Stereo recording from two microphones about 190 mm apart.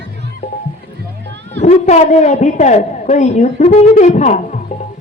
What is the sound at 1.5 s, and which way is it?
A woman's voice, 40° left (ahead or behind).